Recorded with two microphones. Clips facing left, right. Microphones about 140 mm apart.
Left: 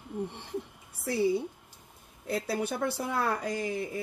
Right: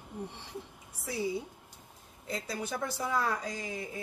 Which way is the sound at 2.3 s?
60° left (ahead or behind).